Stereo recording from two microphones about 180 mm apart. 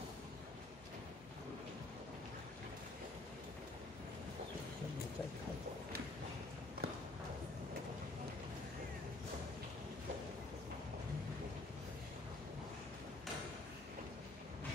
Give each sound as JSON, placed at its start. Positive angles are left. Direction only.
{"t": 6.8, "sound": "clip-clop", "side_deg": -65}